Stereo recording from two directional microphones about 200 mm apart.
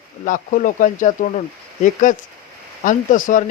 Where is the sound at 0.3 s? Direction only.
40° left (ahead or behind).